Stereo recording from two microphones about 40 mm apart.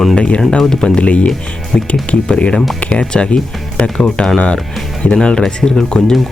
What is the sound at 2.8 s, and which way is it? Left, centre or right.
Speech, left.